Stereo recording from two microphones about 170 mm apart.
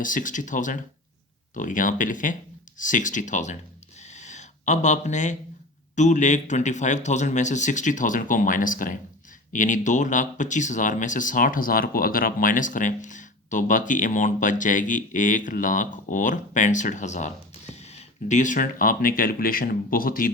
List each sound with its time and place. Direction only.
0.0 s speech: 50° left (ahead or behind)
4.1 s a sound: 45° left (ahead or behind)
6.0 s speech: 45° left (ahead or behind)